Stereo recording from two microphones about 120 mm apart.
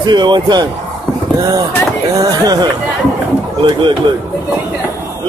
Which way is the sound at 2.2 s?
35° right (ahead or behind).